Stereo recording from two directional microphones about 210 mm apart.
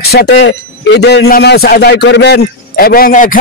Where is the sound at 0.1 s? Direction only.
50° left (ahead or behind).